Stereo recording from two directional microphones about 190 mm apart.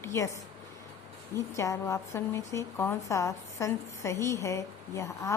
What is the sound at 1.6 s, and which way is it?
A woman's voice, 15° left (ahead or behind).